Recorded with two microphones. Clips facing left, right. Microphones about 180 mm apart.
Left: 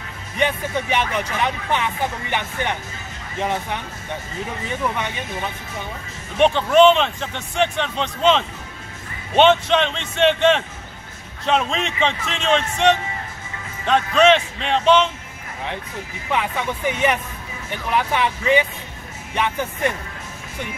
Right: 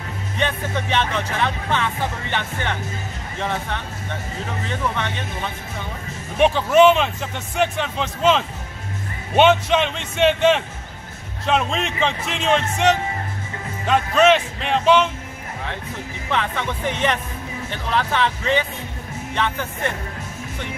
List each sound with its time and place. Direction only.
0.4 s speech: 10° left (ahead or behind)
6.3 s a man's voice: 5° right (ahead or behind)
16.3 s speech: 10° left (ahead or behind)